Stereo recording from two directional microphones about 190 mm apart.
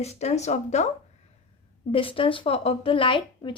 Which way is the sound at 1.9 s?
30° left (ahead or behind).